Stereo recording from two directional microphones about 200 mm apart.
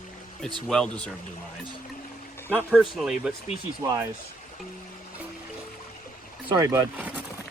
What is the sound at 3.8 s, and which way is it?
Speech, 15° right (ahead or behind).